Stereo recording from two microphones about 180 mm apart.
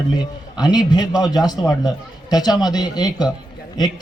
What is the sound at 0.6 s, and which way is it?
A man's voice, 20° left (ahead or behind).